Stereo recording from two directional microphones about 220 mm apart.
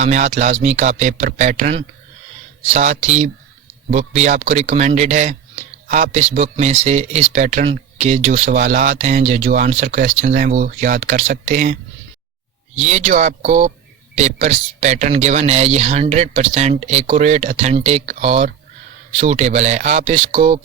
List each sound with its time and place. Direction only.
0.0 s speech: 30° right (ahead or behind)
12.8 s speech: 35° right (ahead or behind)